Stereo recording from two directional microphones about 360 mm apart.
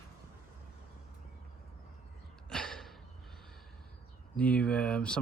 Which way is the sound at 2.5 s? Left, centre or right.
Centre.